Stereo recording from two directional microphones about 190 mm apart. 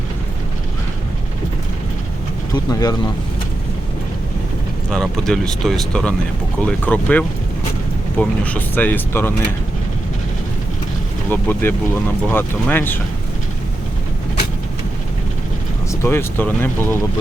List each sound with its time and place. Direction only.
2.6 s speech: 20° left (ahead or behind)
4.9 s speech: 5° left (ahead or behind)
11.3 s speech: 10° left (ahead or behind)
15.9 s speech: 15° left (ahead or behind)